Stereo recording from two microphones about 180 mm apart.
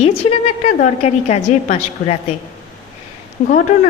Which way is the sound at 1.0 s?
35° left (ahead or behind).